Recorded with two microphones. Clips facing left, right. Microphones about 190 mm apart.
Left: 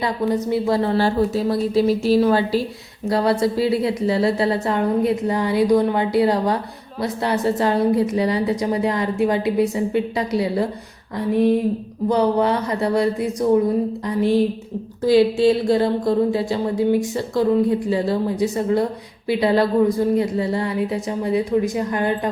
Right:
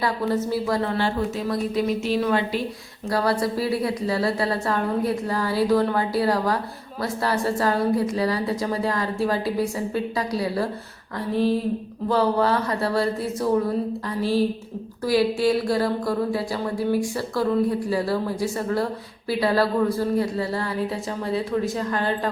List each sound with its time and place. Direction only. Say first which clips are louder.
0.0 s a woman's voice: left 3 dB; 20° left (ahead or behind); by 2.6 s 35° left (ahead or behind)
3.1 s a woman's voice: left 4 dB; 25° left (ahead or behind)
12.0 s a woman's voice: left 3 dB; 20° left (ahead or behind)